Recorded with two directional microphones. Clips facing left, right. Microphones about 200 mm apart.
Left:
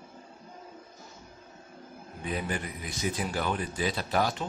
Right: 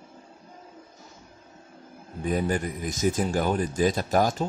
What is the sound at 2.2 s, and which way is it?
Speech, 45° right (ahead or behind).